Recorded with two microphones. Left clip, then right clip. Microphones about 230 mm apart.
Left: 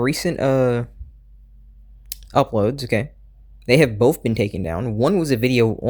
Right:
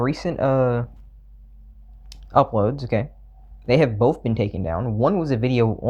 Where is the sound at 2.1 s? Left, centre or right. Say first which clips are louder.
Right 1 dB; left.